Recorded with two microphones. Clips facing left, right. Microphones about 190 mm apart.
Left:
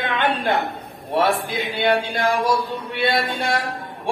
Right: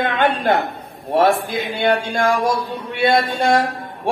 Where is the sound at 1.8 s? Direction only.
45° right (ahead or behind).